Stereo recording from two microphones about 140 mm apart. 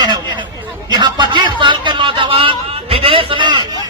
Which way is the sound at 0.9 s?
35° right (ahead or behind).